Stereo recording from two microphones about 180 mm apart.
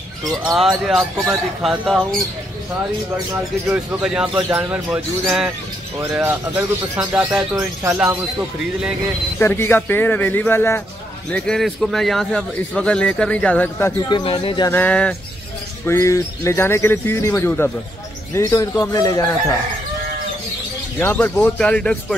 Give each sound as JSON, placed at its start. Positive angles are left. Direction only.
{"t": 0.5, "sound": "speech", "side_deg": 0}
{"t": 3.3, "sound": "speech", "side_deg": -15}
{"t": 9.4, "sound": "speech", "side_deg": 15}
{"t": 14.0, "sound": "a man's voice", "side_deg": 25}
{"t": 14.7, "sound": "a man's voice", "side_deg": 10}
{"t": 21.0, "sound": "speech", "side_deg": 10}